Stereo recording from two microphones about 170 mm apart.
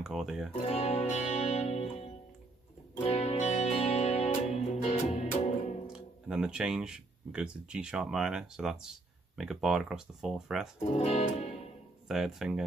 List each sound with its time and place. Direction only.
0.0 s speech: 5° right (ahead or behind)
0.7 s music: 40° left (ahead or behind)
5.9 s speech: 5° right (ahead or behind)
10.9 s speech: 40° left (ahead or behind)
12.1 s speech: 5° right (ahead or behind)